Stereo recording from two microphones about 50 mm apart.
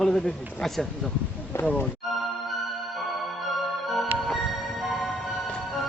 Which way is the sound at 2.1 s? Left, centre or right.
Centre.